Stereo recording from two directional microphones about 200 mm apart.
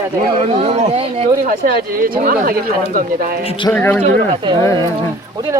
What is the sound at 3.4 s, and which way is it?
Speech, 25° left (ahead or behind).